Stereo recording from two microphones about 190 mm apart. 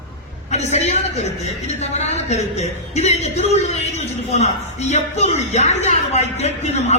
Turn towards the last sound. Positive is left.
turn(degrees=35)  # may be behind; listen again after turning